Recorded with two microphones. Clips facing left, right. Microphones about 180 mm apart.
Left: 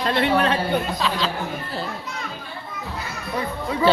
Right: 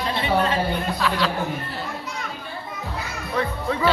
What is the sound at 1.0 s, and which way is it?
Speech, 20° left (ahead or behind).